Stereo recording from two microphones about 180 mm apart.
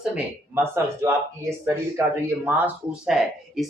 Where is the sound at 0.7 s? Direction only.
15° right (ahead or behind).